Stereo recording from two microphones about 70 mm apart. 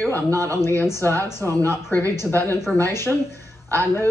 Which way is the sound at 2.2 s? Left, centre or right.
Left.